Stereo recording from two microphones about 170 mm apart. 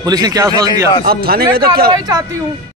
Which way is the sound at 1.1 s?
65° right (ahead or behind).